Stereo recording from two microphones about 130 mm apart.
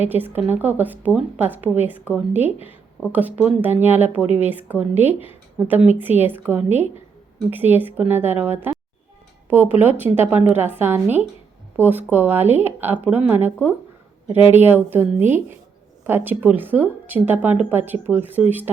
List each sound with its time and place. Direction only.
0.0 s speech: 15° right (ahead or behind)